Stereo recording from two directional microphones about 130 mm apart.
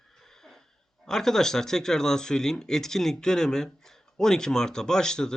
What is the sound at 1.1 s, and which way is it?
Speech, 5° left (ahead or behind).